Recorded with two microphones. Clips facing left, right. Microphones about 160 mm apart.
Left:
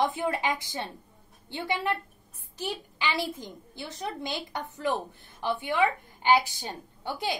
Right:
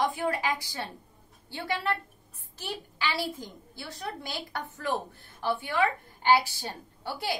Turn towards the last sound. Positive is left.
turn(degrees=20)  # may be behind; listen again after turning